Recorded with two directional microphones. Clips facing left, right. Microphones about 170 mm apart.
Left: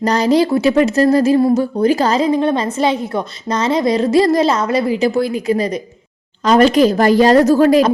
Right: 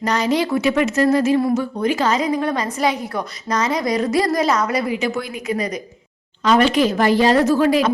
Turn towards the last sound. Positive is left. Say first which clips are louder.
# left 5 dB
turn(degrees=40)  # may be behind; listen again after turning